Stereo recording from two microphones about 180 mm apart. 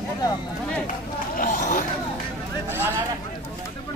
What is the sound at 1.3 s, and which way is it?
Chatter, 45° left (ahead or behind).